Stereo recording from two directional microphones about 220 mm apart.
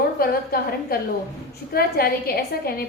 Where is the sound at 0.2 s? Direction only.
45° left (ahead or behind).